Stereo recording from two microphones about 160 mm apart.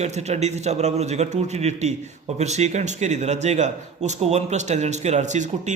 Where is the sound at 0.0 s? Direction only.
45° right (ahead or behind).